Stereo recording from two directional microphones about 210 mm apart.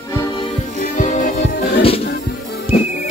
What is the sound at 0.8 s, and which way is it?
Music, 35° left (ahead or behind).